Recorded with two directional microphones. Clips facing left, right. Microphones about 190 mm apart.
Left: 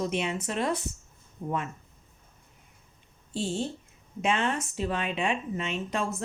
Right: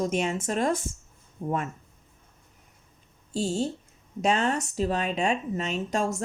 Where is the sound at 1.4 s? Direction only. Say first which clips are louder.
Right 3 dB; 30° right (ahead or behind).